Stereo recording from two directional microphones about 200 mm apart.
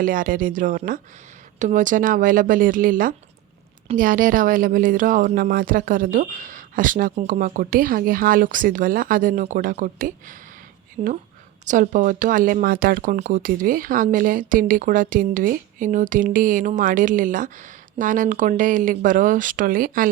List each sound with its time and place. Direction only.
0.0 s speech: 45° right (ahead or behind)
11.0 s speech: 30° right (ahead or behind)